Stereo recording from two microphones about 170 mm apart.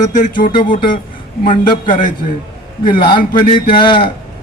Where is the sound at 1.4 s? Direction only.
50° left (ahead or behind).